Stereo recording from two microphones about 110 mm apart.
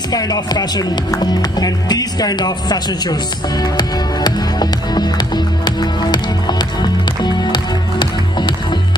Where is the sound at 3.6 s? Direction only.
40° left (ahead or behind).